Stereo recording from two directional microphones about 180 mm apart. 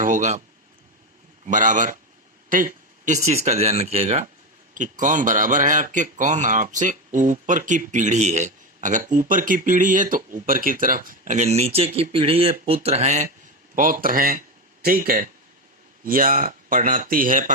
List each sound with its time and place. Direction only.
0.0 s speech: 45° right (ahead or behind)
1.5 s a man's voice: 45° right (ahead or behind)
2.5 s a sound: 50° right (ahead or behind)
3.2 s a man's voice: 35° right (ahead or behind)
13.7 s a man's voice: 50° right (ahead or behind)